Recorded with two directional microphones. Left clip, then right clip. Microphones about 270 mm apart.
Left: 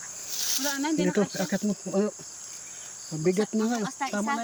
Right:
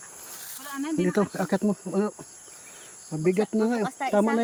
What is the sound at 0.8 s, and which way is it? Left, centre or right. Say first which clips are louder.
Speech: right 4 dB; centre.